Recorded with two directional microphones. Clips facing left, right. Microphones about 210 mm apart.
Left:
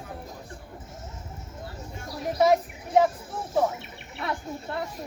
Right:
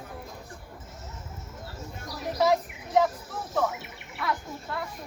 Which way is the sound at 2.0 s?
25° left (ahead or behind).